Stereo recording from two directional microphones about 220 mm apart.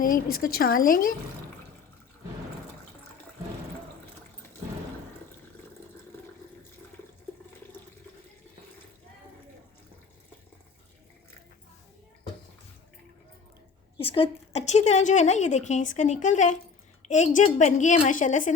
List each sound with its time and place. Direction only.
0.0 s a woman's voice: 40° left (ahead or behind)
14.0 s a woman's voice: 25° left (ahead or behind)